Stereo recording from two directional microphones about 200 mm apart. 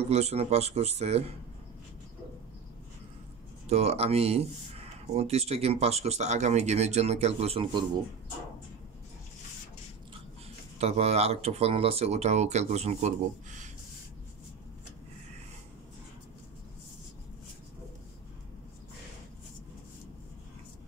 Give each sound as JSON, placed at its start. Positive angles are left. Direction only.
{"t": 0.0, "sound": "speech", "side_deg": -30}
{"t": 3.6, "sound": "speech", "side_deg": -30}
{"t": 10.8, "sound": "speech", "side_deg": -30}